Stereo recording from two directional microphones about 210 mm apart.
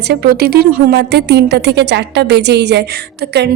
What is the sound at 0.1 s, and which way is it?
Speech, 50° right (ahead or behind).